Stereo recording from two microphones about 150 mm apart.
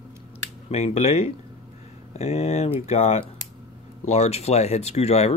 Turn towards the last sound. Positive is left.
turn(degrees=45)  # may be behind; listen again after turning